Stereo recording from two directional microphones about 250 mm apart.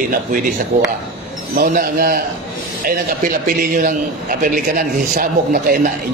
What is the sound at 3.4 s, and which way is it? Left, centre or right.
A man's voice, right.